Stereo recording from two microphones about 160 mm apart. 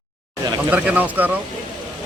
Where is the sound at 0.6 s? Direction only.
10° right (ahead or behind).